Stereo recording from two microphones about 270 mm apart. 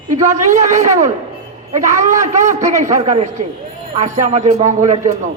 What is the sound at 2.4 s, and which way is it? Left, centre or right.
A man's voice, right.